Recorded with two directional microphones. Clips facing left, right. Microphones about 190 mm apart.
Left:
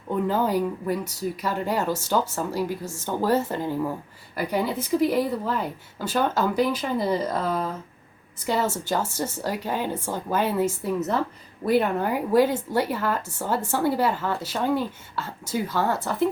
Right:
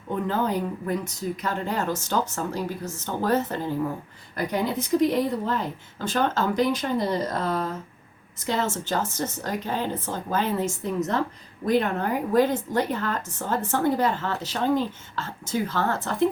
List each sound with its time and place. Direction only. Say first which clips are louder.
0.3 s a woman's voice: left 2 dB; 10° left (ahead or behind)